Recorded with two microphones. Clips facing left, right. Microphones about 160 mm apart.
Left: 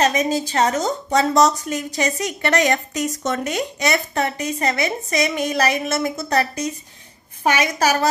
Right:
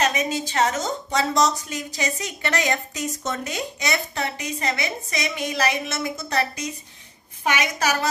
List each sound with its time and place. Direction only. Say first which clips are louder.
0.0 s a woman's voice: left 5 dB; 35° left (ahead or behind)
1.3 s a woman's voice: left 5 dB; 50° left (ahead or behind)